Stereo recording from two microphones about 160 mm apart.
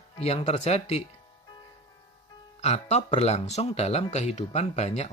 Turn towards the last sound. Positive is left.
turn(degrees=40)  # may be behind; listen again after turning